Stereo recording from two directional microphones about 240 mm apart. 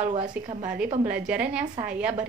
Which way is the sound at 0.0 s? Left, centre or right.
Right.